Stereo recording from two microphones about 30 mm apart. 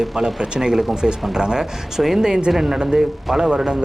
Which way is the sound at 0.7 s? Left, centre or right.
Centre.